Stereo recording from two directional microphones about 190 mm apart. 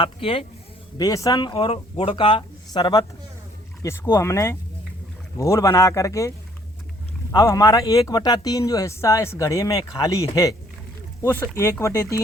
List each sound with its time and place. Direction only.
0.0 s speech: 30° left (ahead or behind)
0.9 s a man's voice: 20° left (ahead or behind)